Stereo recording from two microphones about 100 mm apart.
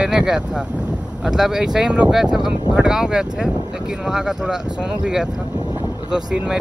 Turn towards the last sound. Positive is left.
turn(degrees=-10)  # may be behind; listen again after turning